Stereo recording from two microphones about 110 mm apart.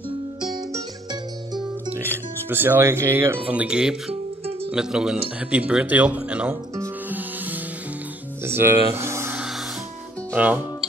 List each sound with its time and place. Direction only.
2.0 s speech: 20° right (ahead or behind)
3.4 s speech: 10° right (ahead or behind)
6.8 s music: 15° right (ahead or behind)
8.5 s speech: 20° right (ahead or behind)
10.3 s speech: 15° right (ahead or behind)